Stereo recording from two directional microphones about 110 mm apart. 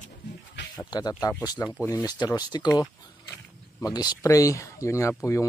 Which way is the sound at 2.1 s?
40° left (ahead or behind).